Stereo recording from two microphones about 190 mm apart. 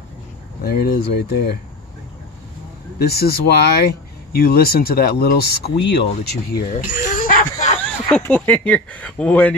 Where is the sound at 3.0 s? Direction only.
55° left (ahead or behind).